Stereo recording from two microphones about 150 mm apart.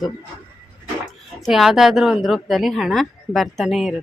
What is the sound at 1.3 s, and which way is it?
A woman's voice, centre (ahead or behind).